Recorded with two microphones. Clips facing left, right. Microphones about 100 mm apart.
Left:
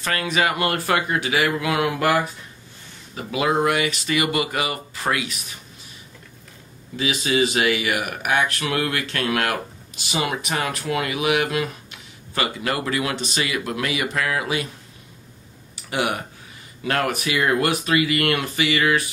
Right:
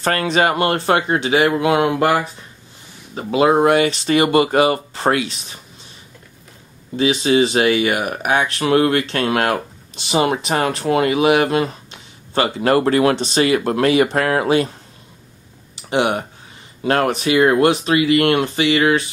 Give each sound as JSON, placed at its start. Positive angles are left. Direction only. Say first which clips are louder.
{"t": 0.0, "sound": "speech", "louder": "right 6 dB", "side_deg": -40}
{"t": 7.0, "sound": "speech", "louder": "right 6 dB", "side_deg": -30}
{"t": 15.7, "sound": "speech", "louder": "right 6 dB", "side_deg": -25}